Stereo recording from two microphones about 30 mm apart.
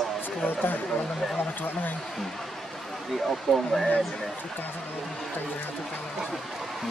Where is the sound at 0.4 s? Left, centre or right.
Left.